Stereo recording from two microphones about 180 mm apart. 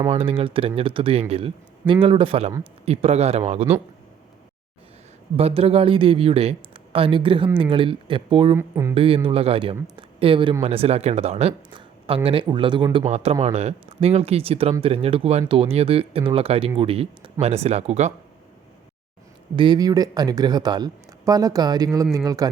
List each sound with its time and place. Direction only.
0.1 s speech: 30° right (ahead or behind)
5.4 s speech: 35° right (ahead or behind)
8.5 s speech: 15° right (ahead or behind)
9.0 s speech: 30° right (ahead or behind)
19.5 s speech: 25° right (ahead or behind)